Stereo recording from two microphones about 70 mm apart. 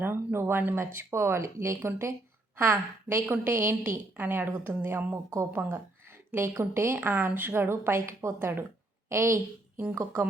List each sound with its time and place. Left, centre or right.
0.0 s a woman's voice: right
2.6 s a woman's voice: right